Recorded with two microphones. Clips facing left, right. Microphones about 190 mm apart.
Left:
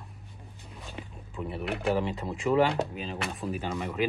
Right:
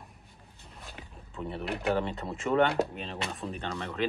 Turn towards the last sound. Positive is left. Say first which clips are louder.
# left 2 dB
turn(degrees=0)  # may be behind; listen again after turning